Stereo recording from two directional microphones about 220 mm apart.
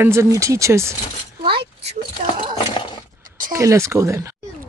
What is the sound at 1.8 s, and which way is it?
Speech, 30° right (ahead or behind).